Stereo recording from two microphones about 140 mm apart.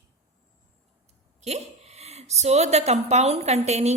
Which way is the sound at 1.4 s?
50° right (ahead or behind).